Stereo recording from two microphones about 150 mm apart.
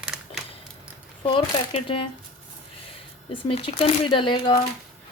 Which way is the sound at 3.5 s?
40° left (ahead or behind).